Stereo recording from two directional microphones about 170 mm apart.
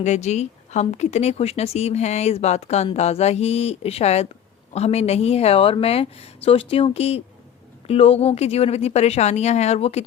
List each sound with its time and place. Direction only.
0.0 s speech: 40° left (ahead or behind)